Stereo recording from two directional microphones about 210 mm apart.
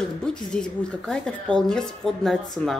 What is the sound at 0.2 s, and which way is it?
Speech, 5° left (ahead or behind).